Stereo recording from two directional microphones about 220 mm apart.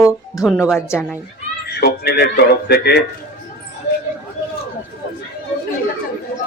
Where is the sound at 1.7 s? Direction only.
45° left (ahead or behind).